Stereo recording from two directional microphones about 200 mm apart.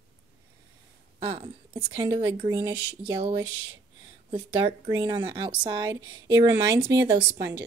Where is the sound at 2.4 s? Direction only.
15° right (ahead or behind).